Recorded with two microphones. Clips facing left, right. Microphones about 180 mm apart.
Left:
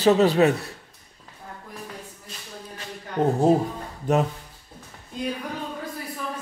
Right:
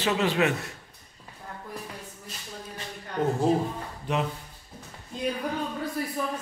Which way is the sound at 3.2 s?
25° left (ahead or behind).